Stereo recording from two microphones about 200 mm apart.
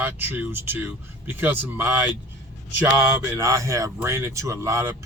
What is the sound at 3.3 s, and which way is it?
Speech, 15° right (ahead or behind).